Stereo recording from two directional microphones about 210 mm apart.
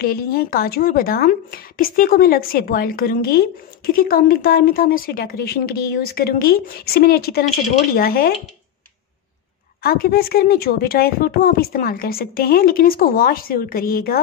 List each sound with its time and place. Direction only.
0.0 s a woman's voice: 45° left (ahead or behind)
9.8 s a woman's voice: 45° left (ahead or behind)